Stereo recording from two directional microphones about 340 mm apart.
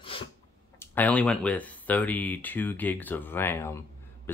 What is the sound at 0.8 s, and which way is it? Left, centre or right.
Speech, centre.